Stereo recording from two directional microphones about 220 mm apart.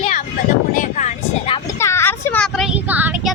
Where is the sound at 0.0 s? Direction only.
35° left (ahead or behind); by 3.3 s 5° right (ahead or behind).